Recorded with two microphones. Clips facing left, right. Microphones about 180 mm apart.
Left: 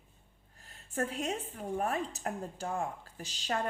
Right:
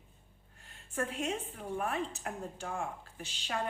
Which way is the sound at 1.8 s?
40° left (ahead or behind).